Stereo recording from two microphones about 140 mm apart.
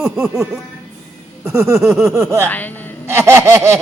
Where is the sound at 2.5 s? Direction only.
10° left (ahead or behind).